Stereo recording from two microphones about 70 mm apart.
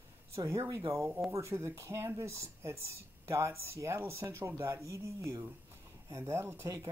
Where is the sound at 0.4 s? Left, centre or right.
Right.